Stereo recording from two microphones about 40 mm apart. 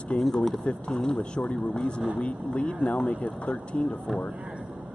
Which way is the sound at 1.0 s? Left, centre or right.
Centre.